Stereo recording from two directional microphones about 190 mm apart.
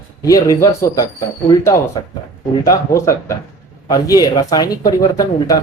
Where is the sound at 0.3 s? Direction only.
15° left (ahead or behind).